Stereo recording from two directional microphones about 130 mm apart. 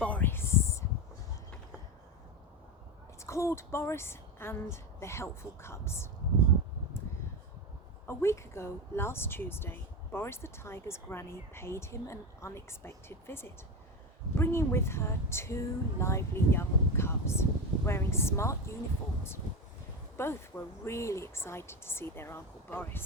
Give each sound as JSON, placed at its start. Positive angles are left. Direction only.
{"t": 0.0, "sound": "a sound", "side_deg": 15}
{"t": 3.2, "sound": "speech", "side_deg": 20}
{"t": 8.0, "sound": "speech", "side_deg": 20}
{"t": 20.1, "sound": "speech", "side_deg": 20}